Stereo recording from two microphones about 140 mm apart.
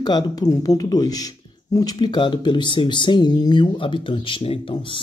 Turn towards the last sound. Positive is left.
turn(degrees=40)  # may be behind; listen again after turning